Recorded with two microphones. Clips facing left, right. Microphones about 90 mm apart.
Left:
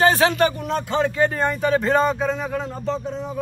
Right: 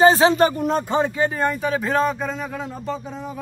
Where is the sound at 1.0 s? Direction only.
15° right (ahead or behind).